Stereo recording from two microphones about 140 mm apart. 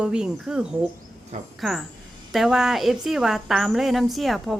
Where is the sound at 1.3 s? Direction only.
50° right (ahead or behind).